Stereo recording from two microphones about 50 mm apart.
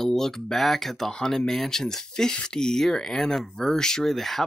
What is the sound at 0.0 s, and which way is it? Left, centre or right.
Speech, centre.